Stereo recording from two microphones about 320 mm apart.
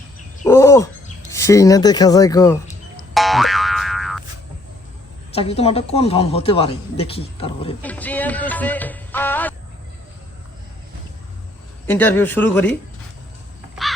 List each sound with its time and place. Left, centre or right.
0.4 s a sound: centre
1.3 s speech: centre
3.2 s boing: centre
5.3 s speech: centre
7.8 s music: centre
11.9 s a man's voice: centre